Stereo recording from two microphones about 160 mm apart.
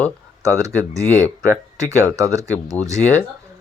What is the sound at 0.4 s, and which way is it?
Speech, 20° right (ahead or behind).